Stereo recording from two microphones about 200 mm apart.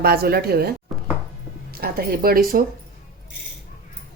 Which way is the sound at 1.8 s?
50° right (ahead or behind).